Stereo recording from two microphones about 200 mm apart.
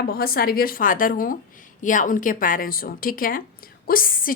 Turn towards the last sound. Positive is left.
turn(degrees=45)  # may be behind; listen again after turning